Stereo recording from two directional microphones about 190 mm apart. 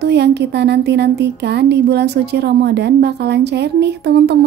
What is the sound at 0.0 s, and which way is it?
A woman's voice, 60° right (ahead or behind).